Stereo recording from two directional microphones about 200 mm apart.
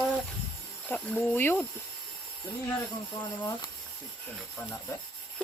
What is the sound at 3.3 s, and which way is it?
Speech, 20° left (ahead or behind).